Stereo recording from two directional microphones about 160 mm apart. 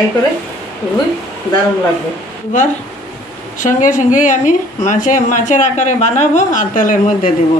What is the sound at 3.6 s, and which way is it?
A woman's voice, 55° left (ahead or behind).